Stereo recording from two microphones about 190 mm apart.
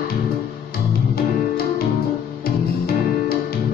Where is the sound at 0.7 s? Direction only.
55° left (ahead or behind).